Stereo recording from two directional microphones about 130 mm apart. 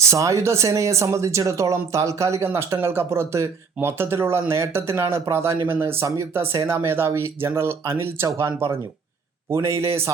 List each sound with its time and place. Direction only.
0.0 s speech: 25° right (ahead or behind)